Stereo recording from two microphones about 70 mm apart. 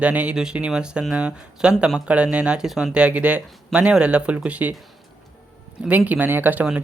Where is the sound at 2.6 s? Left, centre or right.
Centre.